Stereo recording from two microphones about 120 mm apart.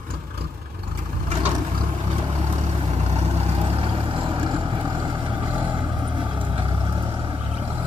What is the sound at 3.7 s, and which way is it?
Vehicle, 50° right (ahead or behind).